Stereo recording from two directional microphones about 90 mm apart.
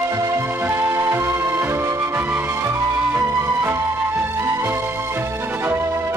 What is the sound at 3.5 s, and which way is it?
Music, 30° right (ahead or behind).